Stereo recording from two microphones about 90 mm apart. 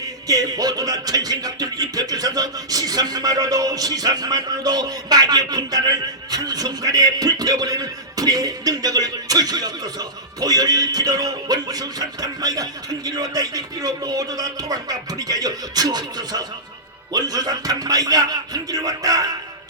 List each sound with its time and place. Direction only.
0.3 s music: 45° right (ahead or behind)